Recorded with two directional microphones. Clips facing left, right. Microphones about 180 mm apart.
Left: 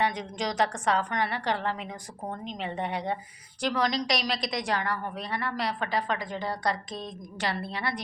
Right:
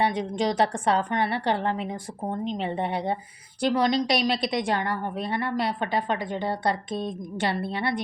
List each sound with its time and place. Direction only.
0.0 s a woman's voice: 30° right (ahead or behind)